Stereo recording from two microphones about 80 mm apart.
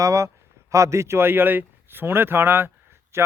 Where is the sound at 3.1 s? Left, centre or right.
Right.